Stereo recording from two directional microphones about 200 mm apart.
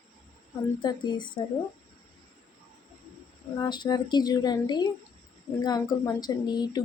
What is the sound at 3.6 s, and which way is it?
Speech, 20° left (ahead or behind).